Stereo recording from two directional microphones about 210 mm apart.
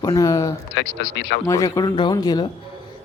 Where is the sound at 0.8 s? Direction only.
60° left (ahead or behind).